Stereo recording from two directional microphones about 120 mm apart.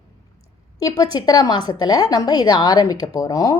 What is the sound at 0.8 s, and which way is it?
A woman's voice, 30° left (ahead or behind).